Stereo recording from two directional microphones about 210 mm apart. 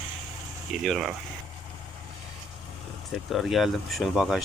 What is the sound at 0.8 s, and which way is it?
Speech, centre (ahead or behind).